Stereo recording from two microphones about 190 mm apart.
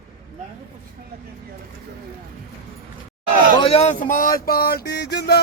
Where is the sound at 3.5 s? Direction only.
30° left (ahead or behind); by 5.4 s 60° left (ahead or behind).